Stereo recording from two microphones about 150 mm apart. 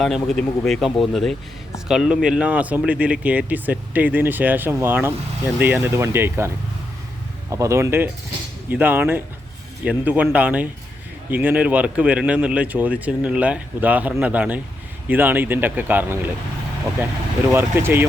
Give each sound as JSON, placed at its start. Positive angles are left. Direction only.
{"t": 0.0, "sound": "speech", "side_deg": 0}
{"t": 7.5, "sound": "speech", "side_deg": -20}
{"t": 17.5, "sound": "speech", "side_deg": -15}